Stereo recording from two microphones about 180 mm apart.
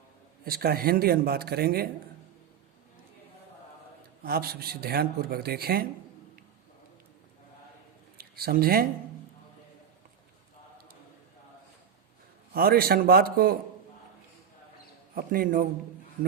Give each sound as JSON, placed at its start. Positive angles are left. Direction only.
{"t": 0.4, "sound": "speech", "side_deg": -55}
{"t": 4.2, "sound": "speech", "side_deg": -60}
{"t": 8.2, "sound": "speech", "side_deg": -55}
{"t": 12.5, "sound": "speech", "side_deg": -55}
{"t": 15.1, "sound": "a man's voice", "side_deg": -55}